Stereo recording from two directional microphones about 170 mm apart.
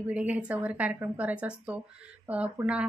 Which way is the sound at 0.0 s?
10° right (ahead or behind).